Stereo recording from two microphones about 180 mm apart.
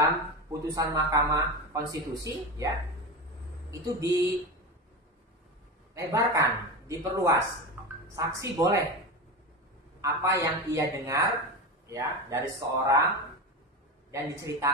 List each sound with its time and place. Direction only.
0.0 s a man's voice: 20° right (ahead or behind)
3.8 s a man's voice: 20° right (ahead or behind)
5.9 s a man's voice: 20° right (ahead or behind)
7.8 s music: 10° right (ahead or behind)
8.2 s speech: 20° right (ahead or behind)
10.0 s speech: 20° right (ahead or behind)
14.1 s a man's voice: 15° right (ahead or behind)